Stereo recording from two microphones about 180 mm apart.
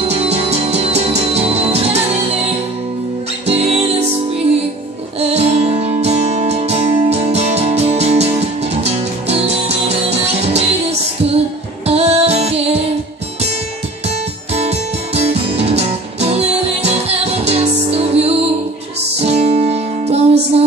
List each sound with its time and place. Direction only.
0.0 s music: 35° right (ahead or behind)
3.4 s music: 35° right (ahead or behind)
5.2 s music: 35° right (ahead or behind)
14.0 s music: 35° right (ahead or behind)